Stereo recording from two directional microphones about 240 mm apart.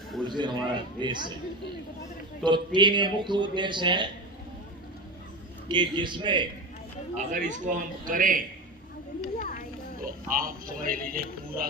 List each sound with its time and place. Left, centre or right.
0.3 s a man's voice: centre
2.4 s a man's voice: centre
5.6 s a man's voice: centre
7.2 s a man's voice: right
9.4 s a sound: left
10.0 s a man's voice: right